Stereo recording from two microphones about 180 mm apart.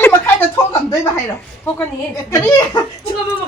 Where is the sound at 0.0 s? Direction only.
15° left (ahead or behind).